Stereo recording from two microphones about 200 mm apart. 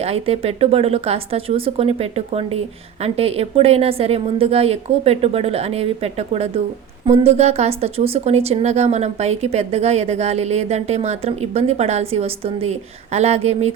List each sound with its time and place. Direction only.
0.0 s a woman's voice: 30° right (ahead or behind)